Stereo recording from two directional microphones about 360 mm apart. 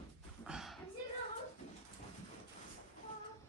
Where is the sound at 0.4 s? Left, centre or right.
Centre.